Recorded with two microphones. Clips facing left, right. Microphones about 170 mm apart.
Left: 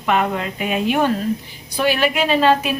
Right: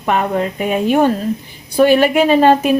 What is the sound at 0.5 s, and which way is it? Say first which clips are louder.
A woman's voice: right 4 dB; 45° right (ahead or behind).